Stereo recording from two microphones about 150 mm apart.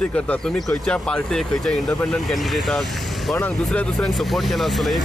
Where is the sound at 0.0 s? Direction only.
5° left (ahead or behind).